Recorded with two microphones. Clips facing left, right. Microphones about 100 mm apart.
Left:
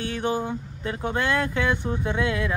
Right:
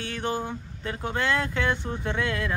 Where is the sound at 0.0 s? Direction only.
15° left (ahead or behind).